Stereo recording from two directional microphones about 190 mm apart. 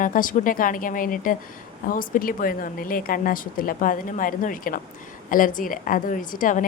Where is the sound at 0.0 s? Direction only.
45° left (ahead or behind).